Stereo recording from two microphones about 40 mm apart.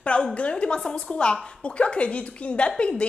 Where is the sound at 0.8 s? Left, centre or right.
Left.